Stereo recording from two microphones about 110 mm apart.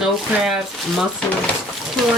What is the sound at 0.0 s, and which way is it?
Speech, centre (ahead or behind).